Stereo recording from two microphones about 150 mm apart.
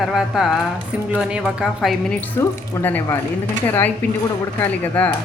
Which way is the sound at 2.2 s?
15° left (ahead or behind).